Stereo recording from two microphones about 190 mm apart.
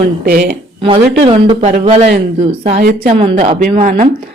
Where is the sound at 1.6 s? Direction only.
35° right (ahead or behind).